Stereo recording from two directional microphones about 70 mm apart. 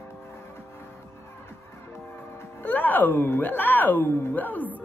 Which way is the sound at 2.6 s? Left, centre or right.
Left.